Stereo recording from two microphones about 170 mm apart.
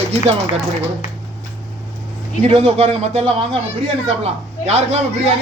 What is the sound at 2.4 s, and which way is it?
A man's voice, 35° right (ahead or behind).